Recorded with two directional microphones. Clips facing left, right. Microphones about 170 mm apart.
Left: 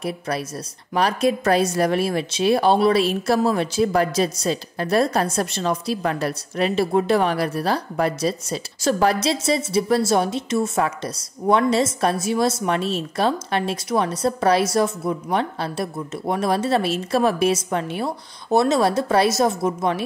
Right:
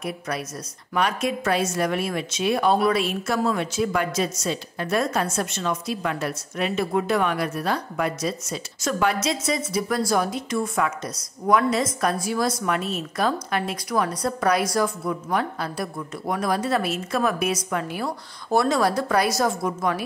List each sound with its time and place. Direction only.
0.9 s a woman's voice: 35° left (ahead or behind)